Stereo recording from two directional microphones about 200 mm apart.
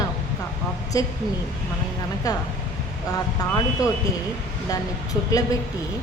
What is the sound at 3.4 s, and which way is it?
Speech, 20° left (ahead or behind).